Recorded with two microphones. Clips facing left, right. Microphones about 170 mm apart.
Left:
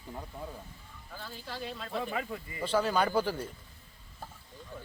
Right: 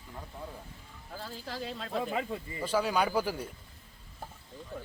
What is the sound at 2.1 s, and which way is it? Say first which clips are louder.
Speech: right 2 dB; 25° right (ahead or behind).